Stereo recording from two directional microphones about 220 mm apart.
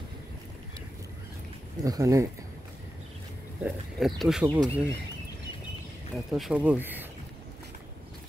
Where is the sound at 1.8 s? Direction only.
15° right (ahead or behind).